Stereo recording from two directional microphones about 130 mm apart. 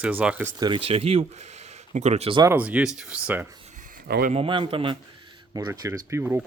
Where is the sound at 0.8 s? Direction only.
50° right (ahead or behind).